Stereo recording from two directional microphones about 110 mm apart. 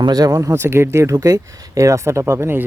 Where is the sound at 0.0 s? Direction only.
35° right (ahead or behind).